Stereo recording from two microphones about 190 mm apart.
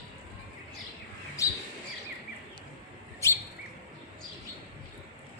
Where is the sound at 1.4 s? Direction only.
15° left (ahead or behind).